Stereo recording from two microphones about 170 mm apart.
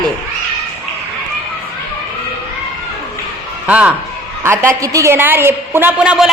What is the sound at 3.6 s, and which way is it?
A woman's voice, 10° right (ahead or behind).